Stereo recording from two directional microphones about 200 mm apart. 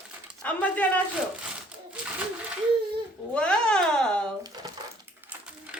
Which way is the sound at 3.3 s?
5° left (ahead or behind).